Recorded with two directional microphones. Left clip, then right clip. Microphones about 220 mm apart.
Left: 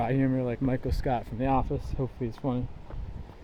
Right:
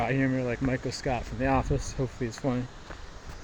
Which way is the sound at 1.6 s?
Centre (ahead or behind).